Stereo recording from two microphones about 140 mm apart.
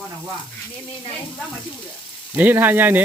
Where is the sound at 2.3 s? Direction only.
15° right (ahead or behind).